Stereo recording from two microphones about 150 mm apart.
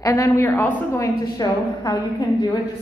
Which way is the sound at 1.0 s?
25° left (ahead or behind).